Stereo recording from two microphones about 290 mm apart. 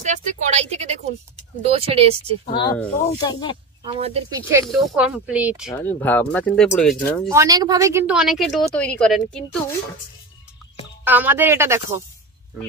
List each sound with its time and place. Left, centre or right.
0.0 s a sound: right
1.7 s speech: centre
2.5 s speech: centre
3.8 s speech: centre
4.5 s speech: centre
5.8 s speech: centre
7.2 s speech: centre
11.1 s speech: centre